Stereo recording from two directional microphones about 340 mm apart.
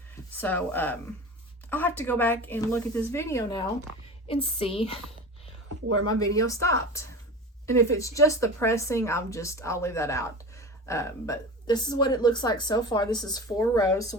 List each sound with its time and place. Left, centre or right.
0.3 s a woman's voice: centre
6.1 s a woman's voice: centre